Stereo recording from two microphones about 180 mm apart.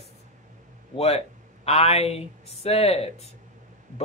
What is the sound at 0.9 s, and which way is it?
Speech, 35° left (ahead or behind).